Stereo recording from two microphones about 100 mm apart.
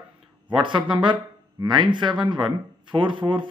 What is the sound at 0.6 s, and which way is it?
A man's voice, 55° right (ahead or behind).